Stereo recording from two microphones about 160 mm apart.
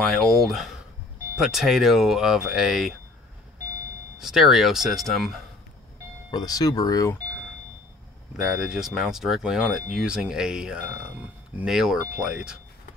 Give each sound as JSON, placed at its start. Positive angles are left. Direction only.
{"t": 0.0, "sound": "speech", "side_deg": 0}
{"t": 4.2, "sound": "speech", "side_deg": 0}
{"t": 6.3, "sound": "speech", "side_deg": 25}
{"t": 8.4, "sound": "speech", "side_deg": 0}